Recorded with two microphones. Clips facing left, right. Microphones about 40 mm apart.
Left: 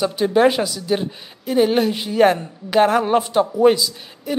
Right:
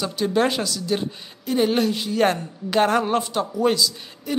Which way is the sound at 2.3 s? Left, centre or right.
Centre.